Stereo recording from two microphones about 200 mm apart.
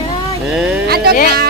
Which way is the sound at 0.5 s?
5° right (ahead or behind).